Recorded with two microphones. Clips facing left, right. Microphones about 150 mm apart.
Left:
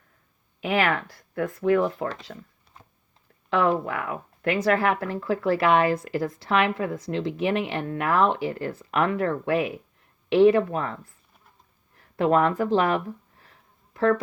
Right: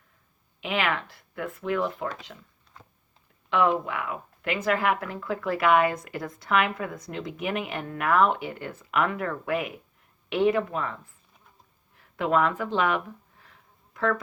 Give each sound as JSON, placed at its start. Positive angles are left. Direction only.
{"t": 0.6, "sound": "speech", "side_deg": 40}
{"t": 3.5, "sound": "speech", "side_deg": 40}
{"t": 13.4, "sound": "a sound", "side_deg": 35}